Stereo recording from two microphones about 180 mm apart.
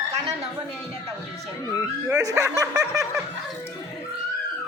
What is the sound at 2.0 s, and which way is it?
Speech, 20° right (ahead or behind).